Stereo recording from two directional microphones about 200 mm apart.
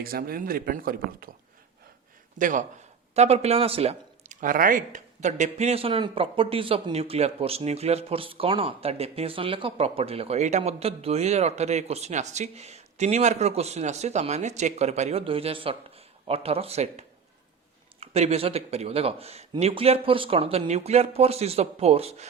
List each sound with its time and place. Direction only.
0.0 s speech: 45° right (ahead or behind)
2.4 s speech: 40° right (ahead or behind)